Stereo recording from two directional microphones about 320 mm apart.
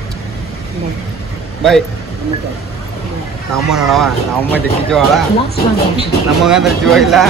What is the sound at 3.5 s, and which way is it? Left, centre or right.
Speech, centre.